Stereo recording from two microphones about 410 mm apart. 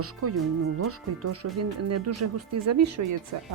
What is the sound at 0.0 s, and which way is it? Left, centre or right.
A woman's voice, right.